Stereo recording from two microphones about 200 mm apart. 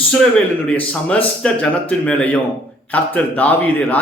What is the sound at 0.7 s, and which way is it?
Speech, 5° left (ahead or behind).